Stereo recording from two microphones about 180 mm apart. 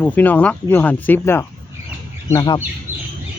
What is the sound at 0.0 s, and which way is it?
Speech, 10° left (ahead or behind).